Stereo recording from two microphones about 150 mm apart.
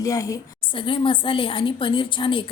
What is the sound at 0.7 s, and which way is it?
A woman's voice, 35° left (ahead or behind).